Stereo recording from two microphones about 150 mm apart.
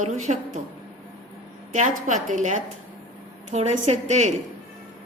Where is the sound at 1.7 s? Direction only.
55° right (ahead or behind).